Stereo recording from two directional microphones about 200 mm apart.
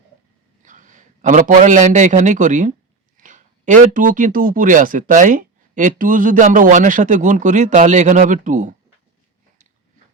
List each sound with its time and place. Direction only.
0.6 s a man's voice: 40° right (ahead or behind)